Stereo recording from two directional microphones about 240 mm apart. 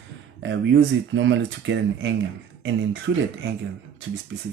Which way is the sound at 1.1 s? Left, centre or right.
Right.